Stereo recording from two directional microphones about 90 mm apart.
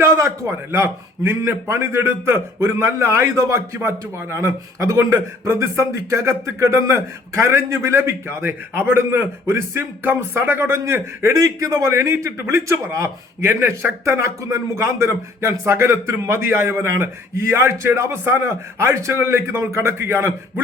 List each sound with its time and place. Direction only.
0.0 s a man's voice: 30° right (ahead or behind)